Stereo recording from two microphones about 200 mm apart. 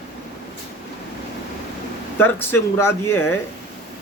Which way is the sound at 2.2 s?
10° left (ahead or behind).